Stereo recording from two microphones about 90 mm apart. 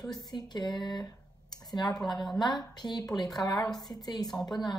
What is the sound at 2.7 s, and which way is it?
Speech, 50° left (ahead or behind).